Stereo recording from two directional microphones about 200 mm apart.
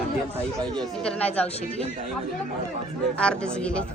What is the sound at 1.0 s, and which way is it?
Speech, 5° left (ahead or behind).